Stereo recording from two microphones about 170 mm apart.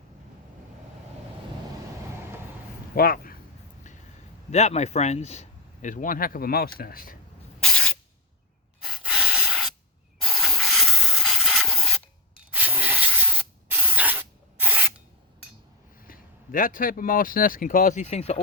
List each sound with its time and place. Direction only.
2.9 s a sound: 60° left (ahead or behind)
4.5 s speech: 40° left (ahead or behind); by 7.2 s 55° left (ahead or behind)
7.6 s spray: 5° left (ahead or behind)
8.8 s breathing: 5° right (ahead or behind)
10.2 s spray: centre (ahead or behind)
12.4 s spray: 10° right (ahead or behind)
16.0 s speech: 55° left (ahead or behind); by 18.3 s 40° left (ahead or behind)